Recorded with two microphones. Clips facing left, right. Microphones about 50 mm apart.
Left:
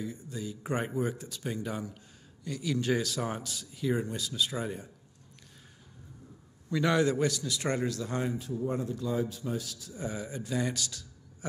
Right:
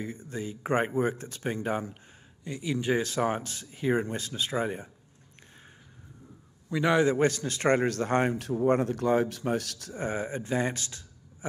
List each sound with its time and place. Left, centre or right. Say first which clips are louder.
0.0 s speech: right 2 dB; right
2.4 s speech: right 1 dB; right
6.7 s a man's voice: right 3 dB; right
7.2 s speech: right 4 dB; right
10.0 s speech: right 5 dB; right